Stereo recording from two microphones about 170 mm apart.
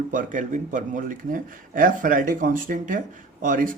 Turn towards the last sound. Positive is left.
turn(degrees=-50)  # may be behind; listen again after turning